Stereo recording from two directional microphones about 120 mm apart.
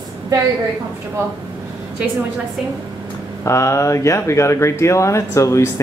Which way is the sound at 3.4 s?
25° left (ahead or behind).